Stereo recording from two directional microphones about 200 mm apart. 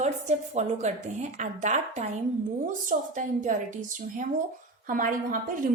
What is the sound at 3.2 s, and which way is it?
A woman's voice, 40° right (ahead or behind).